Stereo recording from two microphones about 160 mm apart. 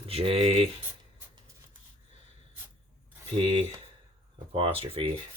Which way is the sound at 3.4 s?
35° right (ahead or behind).